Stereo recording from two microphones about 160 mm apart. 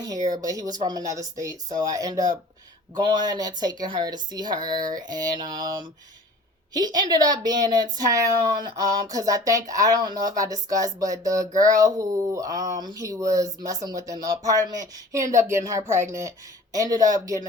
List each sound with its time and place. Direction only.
0.4 s speech: 20° right (ahead or behind)